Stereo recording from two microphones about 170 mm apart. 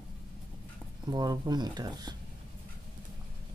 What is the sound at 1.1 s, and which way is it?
Speech, 25° right (ahead or behind).